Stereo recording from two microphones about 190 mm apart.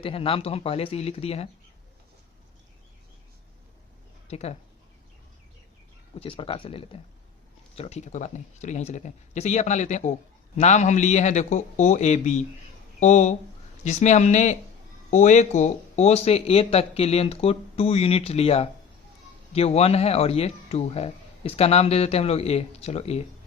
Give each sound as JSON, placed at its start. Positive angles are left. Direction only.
{"t": 0.0, "sound": "speech", "side_deg": 30}
{"t": 4.3, "sound": "speech", "side_deg": 35}
{"t": 6.1, "sound": "speech", "side_deg": 30}